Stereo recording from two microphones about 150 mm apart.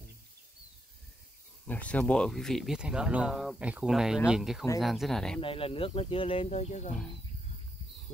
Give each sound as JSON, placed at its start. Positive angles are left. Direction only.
{"t": 1.7, "sound": "speech", "side_deg": 10}
{"t": 5.4, "sound": "speech", "side_deg": 35}